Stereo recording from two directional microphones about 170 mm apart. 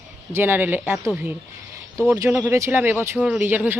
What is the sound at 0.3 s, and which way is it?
Speech, 10° right (ahead or behind).